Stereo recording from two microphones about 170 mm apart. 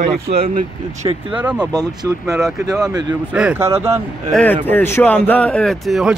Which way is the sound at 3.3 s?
10° right (ahead or behind).